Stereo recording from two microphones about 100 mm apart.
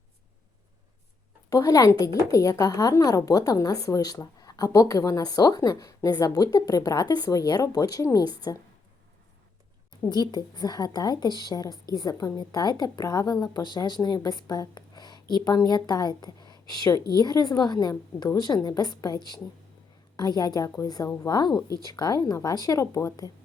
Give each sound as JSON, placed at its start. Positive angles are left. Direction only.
{"t": 1.5, "sound": "speech", "side_deg": 35}
{"t": 10.0, "sound": "speech", "side_deg": 45}